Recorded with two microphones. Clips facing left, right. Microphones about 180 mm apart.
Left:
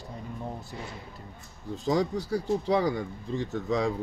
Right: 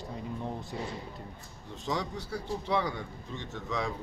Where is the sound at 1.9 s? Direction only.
40° left (ahead or behind).